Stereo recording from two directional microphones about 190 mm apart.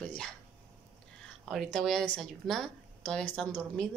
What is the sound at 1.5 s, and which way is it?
A woman's voice, centre (ahead or behind).